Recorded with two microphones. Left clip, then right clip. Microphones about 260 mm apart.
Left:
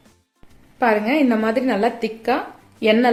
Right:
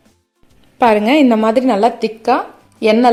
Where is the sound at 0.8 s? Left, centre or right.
Right.